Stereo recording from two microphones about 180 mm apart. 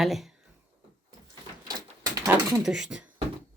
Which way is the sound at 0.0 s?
Centre (ahead or behind).